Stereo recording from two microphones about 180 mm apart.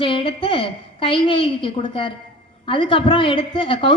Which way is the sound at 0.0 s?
30° left (ahead or behind).